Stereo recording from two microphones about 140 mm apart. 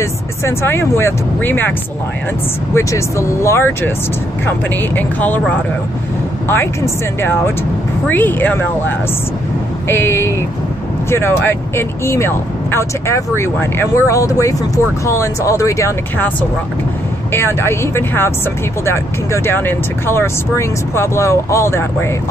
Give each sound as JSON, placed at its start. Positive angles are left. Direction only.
{"t": 0.0, "sound": "speech", "side_deg": 20}
{"t": 2.7, "sound": "speech", "side_deg": 20}
{"t": 8.1, "sound": "speech", "side_deg": 15}
{"t": 17.3, "sound": "speech", "side_deg": 20}